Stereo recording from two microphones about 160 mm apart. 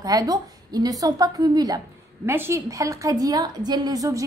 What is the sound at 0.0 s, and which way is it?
A woman's voice, 25° right (ahead or behind).